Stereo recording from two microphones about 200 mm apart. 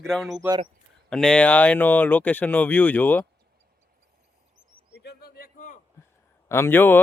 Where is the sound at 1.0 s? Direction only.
5° left (ahead or behind).